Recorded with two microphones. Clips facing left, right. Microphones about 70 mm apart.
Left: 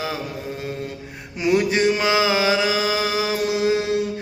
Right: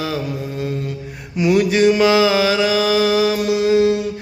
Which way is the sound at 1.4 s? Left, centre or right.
Left.